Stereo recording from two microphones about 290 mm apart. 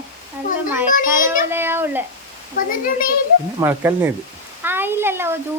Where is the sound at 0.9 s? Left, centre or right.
Left.